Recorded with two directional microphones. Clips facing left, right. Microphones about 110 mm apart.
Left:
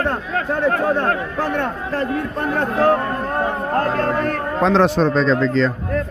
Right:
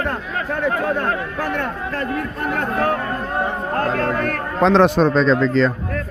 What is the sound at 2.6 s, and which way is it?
Speech, 30° left (ahead or behind).